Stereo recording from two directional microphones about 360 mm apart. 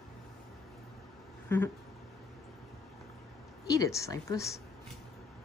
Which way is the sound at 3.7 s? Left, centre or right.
Centre.